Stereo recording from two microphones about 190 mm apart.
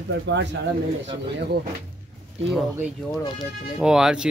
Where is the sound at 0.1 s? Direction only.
65° right (ahead or behind).